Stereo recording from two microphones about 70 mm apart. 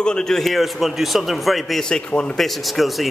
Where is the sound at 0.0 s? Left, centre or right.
Centre.